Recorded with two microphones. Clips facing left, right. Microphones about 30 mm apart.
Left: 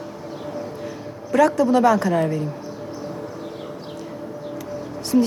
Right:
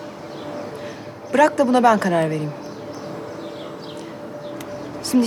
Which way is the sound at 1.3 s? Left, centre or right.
Centre.